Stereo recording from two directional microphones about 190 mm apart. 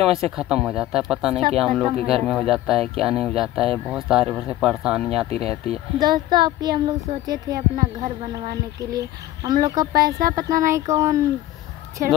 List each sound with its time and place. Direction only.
0.0 s speech: 30° right (ahead or behind)
0.4 s speech: 5° right (ahead or behind)
2.0 s speech: 30° right (ahead or behind)
2.5 s speech: centre (ahead or behind)
5.3 s speech: 30° right (ahead or behind); by 11.2 s 15° right (ahead or behind)